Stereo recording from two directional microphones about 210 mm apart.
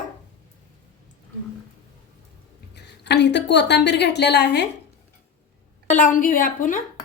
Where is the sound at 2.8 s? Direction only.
55° left (ahead or behind).